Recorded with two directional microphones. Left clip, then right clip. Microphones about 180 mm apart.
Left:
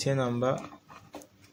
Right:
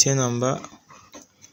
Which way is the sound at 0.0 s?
60° right (ahead or behind).